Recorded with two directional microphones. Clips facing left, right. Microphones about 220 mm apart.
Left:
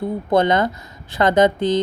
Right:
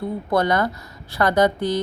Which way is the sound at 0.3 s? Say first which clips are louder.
Left 3 dB; 20° left (ahead or behind).